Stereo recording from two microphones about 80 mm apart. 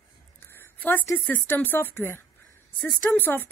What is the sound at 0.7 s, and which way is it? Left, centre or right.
A woman's voice, left.